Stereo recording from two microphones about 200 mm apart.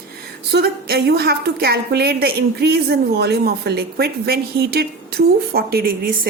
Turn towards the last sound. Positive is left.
turn(degrees=-45)  # may be behind; listen again after turning